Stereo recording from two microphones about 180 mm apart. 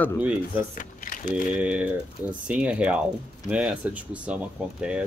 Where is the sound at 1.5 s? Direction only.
5° right (ahead or behind).